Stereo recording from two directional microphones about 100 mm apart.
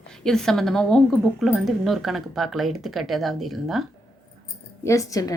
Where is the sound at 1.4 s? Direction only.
5° right (ahead or behind).